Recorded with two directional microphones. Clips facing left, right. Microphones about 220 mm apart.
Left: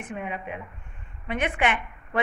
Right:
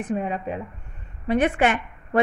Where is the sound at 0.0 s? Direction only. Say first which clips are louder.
Right 7 dB; 35° right (ahead or behind).